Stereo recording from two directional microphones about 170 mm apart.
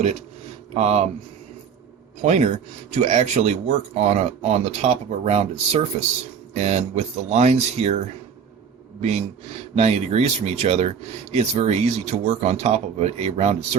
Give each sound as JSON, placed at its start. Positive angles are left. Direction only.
{"t": 0.7, "sound": "speech", "side_deg": -40}
{"t": 2.2, "sound": "speech", "side_deg": -45}
{"t": 9.0, "sound": "speech", "side_deg": -40}